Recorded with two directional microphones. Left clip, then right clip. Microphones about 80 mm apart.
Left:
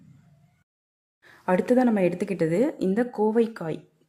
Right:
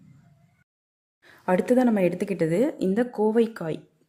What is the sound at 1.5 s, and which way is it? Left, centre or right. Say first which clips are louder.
Speech: even; centre.